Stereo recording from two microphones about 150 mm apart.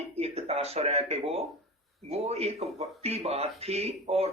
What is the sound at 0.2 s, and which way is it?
A man's voice, 45° right (ahead or behind).